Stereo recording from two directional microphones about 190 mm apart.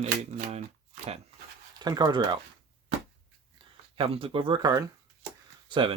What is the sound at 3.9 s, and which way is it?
Speech, 30° right (ahead or behind).